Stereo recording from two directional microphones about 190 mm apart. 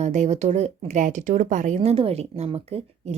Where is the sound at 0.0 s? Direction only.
40° right (ahead or behind).